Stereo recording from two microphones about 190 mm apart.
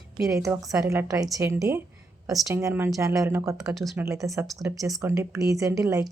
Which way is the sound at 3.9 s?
15° right (ahead or behind).